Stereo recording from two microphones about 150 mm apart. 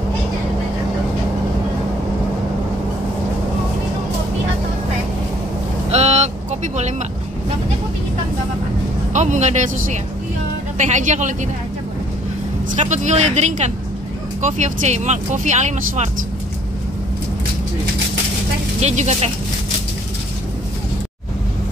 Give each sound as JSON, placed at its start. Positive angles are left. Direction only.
{"t": 5.9, "sound": "vehicle", "side_deg": -45}
{"t": 9.1, "sound": "speech", "side_deg": -55}
{"t": 10.8, "sound": "speech", "side_deg": -55}
{"t": 12.7, "sound": "speech", "side_deg": -50}
{"t": 18.8, "sound": "speech", "side_deg": -50}